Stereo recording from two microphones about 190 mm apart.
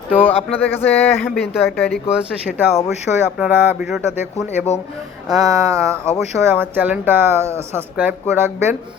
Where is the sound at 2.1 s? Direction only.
5° right (ahead or behind).